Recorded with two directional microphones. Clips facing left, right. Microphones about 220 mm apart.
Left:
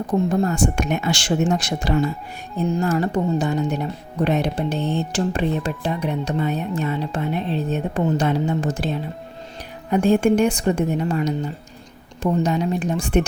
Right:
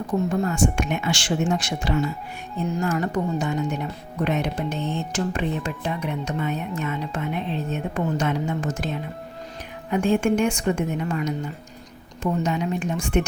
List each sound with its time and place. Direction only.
0.3 s speech: 35° left (ahead or behind)